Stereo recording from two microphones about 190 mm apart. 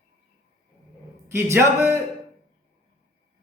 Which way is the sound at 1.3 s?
15° right (ahead or behind).